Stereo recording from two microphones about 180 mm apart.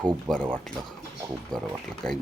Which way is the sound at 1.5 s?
5° left (ahead or behind).